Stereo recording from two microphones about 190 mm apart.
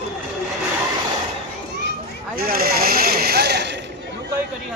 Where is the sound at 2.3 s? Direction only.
50° right (ahead or behind).